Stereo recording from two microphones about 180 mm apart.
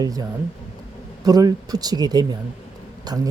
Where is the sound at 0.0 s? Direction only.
20° right (ahead or behind).